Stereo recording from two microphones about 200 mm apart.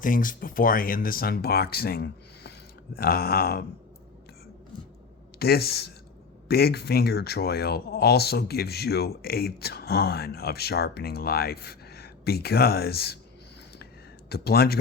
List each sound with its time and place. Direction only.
0.0 s speech: 40° left (ahead or behind)
5.4 s speech: 50° left (ahead or behind)
14.3 s speech: 50° left (ahead or behind)